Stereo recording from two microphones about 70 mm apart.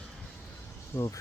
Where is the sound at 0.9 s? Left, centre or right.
Left.